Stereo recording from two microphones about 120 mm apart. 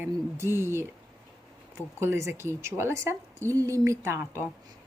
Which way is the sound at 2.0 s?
20° right (ahead or behind).